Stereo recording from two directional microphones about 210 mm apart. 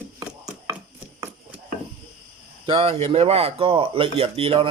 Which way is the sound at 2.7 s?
30° right (ahead or behind).